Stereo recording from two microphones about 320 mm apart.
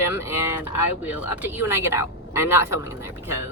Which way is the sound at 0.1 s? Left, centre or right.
Centre.